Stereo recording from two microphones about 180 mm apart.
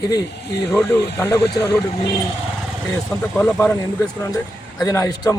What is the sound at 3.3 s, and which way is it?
Speech, 15° left (ahead or behind).